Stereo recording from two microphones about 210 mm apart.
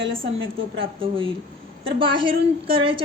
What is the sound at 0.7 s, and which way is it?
A woman's voice, 25° right (ahead or behind).